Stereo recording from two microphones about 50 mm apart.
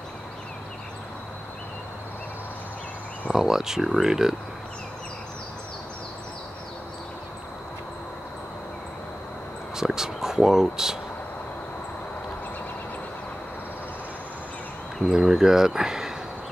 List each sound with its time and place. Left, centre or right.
3.3 s speech: centre
9.8 s speech: centre
15.0 s speech: centre